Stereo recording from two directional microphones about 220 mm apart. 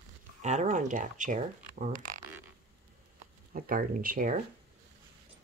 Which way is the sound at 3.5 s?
40° right (ahead or behind).